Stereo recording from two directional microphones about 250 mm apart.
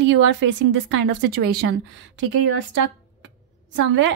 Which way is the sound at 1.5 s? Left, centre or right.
Right.